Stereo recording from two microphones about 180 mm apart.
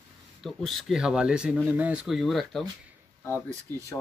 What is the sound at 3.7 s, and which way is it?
Speech, 15° left (ahead or behind).